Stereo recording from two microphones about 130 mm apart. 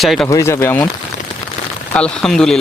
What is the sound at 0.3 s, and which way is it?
Speech, 25° left (ahead or behind).